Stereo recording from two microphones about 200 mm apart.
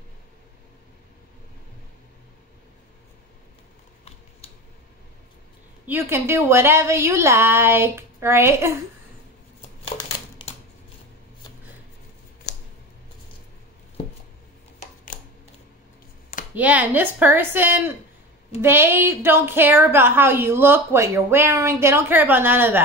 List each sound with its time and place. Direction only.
5.9 s a woman's voice: 10° right (ahead or behind)
10.4 s typewriter: 25° left (ahead or behind)
12.5 s a sound: 55° left (ahead or behind)
16.5 s a woman's voice: 10° right (ahead or behind)